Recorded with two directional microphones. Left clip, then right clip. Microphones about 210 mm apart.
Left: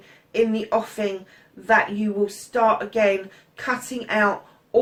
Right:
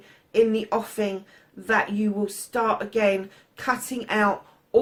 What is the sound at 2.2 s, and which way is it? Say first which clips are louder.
Speech: left 7 dB; 45° right (ahead or behind).